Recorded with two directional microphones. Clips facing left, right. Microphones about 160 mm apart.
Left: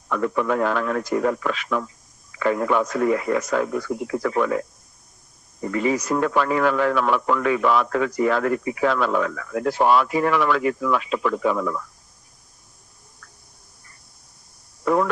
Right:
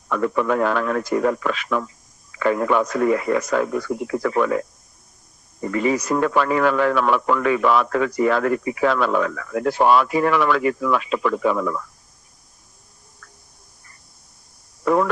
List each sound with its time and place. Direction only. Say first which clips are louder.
0.1 s speech: right 2 dB; 75° right (ahead or behind)
5.7 s speech: right 1 dB; 75° right (ahead or behind)
14.8 s radio: right 2 dB; 75° right (ahead or behind)